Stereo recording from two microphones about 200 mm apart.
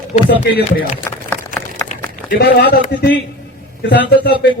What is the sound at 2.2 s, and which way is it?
A man's voice, 55° left (ahead or behind).